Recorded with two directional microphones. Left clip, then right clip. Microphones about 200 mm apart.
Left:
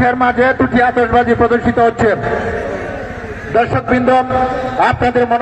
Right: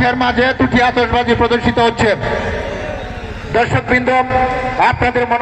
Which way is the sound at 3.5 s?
40° left (ahead or behind).